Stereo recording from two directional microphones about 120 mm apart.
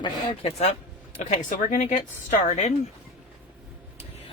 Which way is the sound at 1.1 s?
85° left.